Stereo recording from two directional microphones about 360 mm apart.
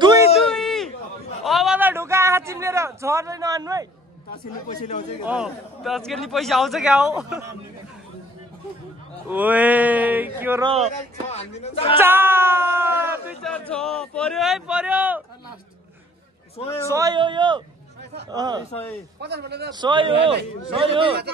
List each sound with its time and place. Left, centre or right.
0.0 s a sound: centre
0.5 s a sound: centre
4.6 s speech: centre
5.2 s speech: centre
9.3 s speech: centre
11.2 s speech: centre
12.0 s speech: centre
16.8 s speech: centre
19.2 s a man's voice: right
19.7 s speech: centre